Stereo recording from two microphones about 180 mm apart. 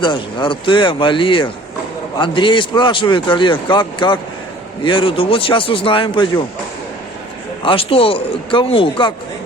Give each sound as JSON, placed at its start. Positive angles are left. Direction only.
{"t": 0.0, "sound": "speech", "side_deg": 25}
{"t": 7.6, "sound": "a man's voice", "side_deg": 30}